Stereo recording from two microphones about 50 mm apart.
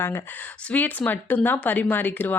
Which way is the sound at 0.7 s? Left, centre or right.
Left.